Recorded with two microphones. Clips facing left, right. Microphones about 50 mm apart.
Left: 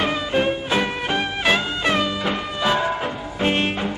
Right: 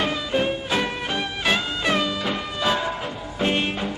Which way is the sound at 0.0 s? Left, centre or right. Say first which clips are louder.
Left 2 dB; centre.